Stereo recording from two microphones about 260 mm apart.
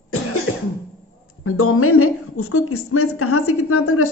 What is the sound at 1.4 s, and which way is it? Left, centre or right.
A woman's voice, left.